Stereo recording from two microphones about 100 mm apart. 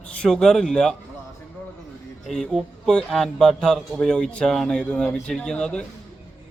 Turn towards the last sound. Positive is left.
turn(degrees=10)  # may be behind; listen again after turning